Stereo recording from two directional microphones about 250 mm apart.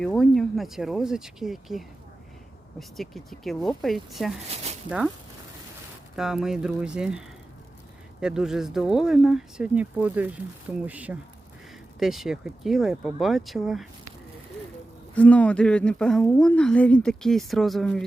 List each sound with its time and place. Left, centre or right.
0.0 s speech: centre
4.5 s a sound: right
4.9 s speech: centre
6.1 s speech: centre
15.1 s speech: centre